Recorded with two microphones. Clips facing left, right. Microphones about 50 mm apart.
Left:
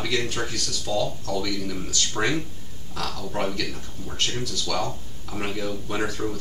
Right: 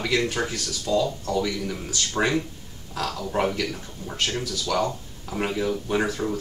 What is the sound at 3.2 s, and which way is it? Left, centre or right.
Speech, centre.